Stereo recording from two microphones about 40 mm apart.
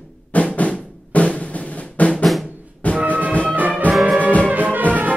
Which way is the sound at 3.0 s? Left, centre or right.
Right.